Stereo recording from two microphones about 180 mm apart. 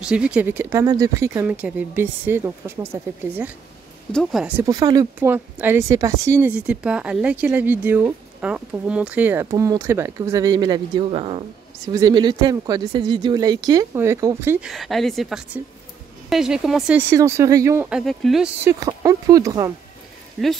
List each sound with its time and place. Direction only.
0.0 s speech: 5° right (ahead or behind)
4.1 s a woman's voice: centre (ahead or behind)
4.6 s speech: 20° right (ahead or behind)
14.7 s a woman's voice: centre (ahead or behind)
17.1 s speech: 15° right (ahead or behind); by 18.5 s centre (ahead or behind)
18.6 s speech: 20° right (ahead or behind)